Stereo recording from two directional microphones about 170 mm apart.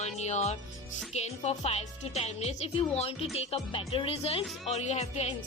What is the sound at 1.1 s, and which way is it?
A woman's voice, 40° left (ahead or behind).